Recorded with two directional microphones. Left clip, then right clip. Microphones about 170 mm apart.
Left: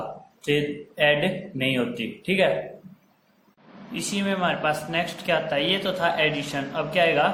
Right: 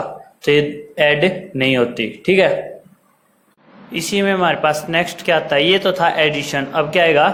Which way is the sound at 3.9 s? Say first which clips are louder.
Right 10 dB; 40° right (ahead or behind).